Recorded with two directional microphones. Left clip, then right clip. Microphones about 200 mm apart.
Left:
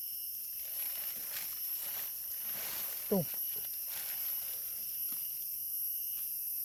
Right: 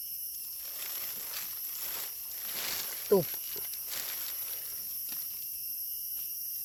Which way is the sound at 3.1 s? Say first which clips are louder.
Right 8 dB; 25° right (ahead or behind).